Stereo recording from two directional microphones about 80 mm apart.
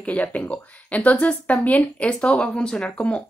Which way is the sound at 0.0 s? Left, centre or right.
Centre.